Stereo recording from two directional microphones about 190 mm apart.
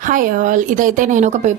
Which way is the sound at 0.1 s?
45° right (ahead or behind).